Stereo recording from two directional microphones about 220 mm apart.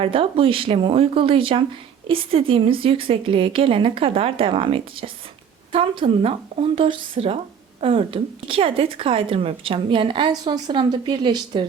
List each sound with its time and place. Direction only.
0.0 s a woman's voice: 25° right (ahead or behind)